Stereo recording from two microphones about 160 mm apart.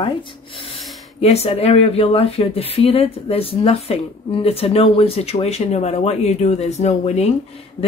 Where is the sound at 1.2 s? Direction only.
40° left (ahead or behind).